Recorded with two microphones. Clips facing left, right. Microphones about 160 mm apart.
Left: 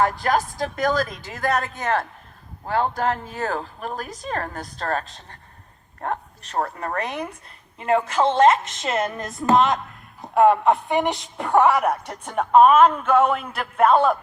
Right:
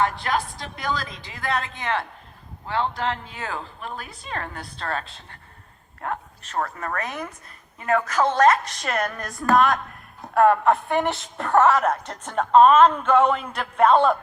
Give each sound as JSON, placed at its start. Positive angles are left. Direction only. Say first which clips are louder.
{"t": 0.0, "sound": "a woman's voice", "louder": "left 3 dB", "side_deg": 45}